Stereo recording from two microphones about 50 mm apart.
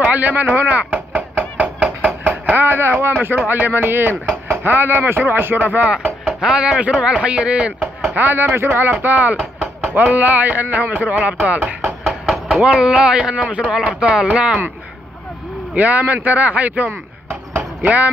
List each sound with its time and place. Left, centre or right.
0.0 s chop: right
3.4 s a man's voice: right
5.6 s a man's voice: right
6.4 s a man's voice: centre
8.2 s a man's voice: right
12.1 s a sound: centre
12.6 s a man's voice: right
15.7 s a man's voice: right